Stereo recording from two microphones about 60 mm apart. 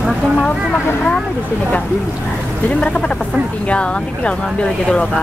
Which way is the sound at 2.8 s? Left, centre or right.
Centre.